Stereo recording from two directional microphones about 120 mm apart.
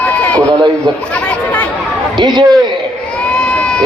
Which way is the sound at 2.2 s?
35° right (ahead or behind).